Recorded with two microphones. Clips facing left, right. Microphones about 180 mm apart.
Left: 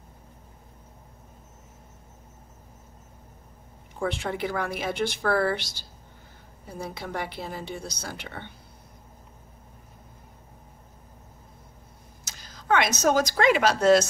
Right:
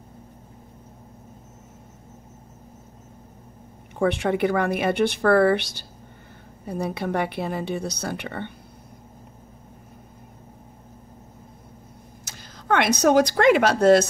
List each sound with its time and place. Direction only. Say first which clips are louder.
3.9 s speech: right 7 dB; 65° right (ahead or behind)
12.3 s a sound: right 1 dB; 55° right (ahead or behind)
13.0 s speech: right 7 dB; 60° right (ahead or behind)